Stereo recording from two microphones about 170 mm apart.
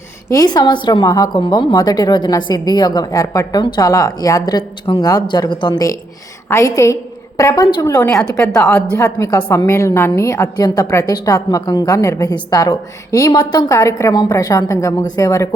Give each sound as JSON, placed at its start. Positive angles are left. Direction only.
{"t": 0.3, "sound": "a woman's voice", "side_deg": 20}